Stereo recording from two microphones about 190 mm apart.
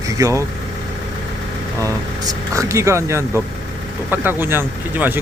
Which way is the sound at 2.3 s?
15° right (ahead or behind).